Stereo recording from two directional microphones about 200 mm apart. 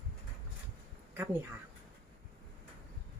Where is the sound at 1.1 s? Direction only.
10° right (ahead or behind).